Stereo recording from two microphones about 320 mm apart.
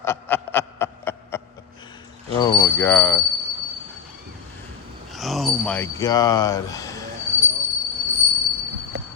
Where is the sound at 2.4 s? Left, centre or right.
Centre.